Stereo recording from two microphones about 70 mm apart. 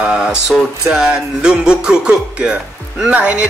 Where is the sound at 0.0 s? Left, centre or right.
Centre.